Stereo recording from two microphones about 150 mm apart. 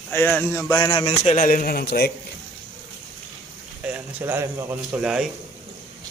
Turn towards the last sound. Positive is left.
turn(degrees=-5)  # may be behind; listen again after turning